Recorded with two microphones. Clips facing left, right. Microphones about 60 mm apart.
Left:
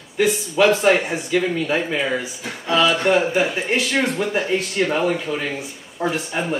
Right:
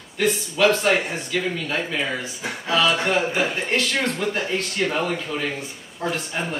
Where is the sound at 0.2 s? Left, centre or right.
Centre.